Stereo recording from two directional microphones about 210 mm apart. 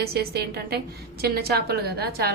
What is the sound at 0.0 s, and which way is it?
A woman's voice, 50° right (ahead or behind).